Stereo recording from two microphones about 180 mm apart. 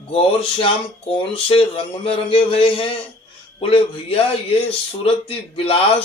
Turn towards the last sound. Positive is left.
turn(degrees=35)  # may be behind; listen again after turning